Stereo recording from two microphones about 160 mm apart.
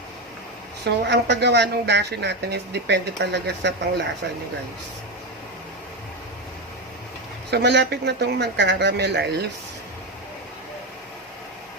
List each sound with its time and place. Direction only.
0.9 s speech: 90° right
7.5 s speech: 90° right